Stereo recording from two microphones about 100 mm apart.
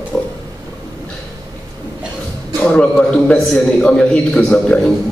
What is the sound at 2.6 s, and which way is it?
A man's voice, 15° left (ahead or behind).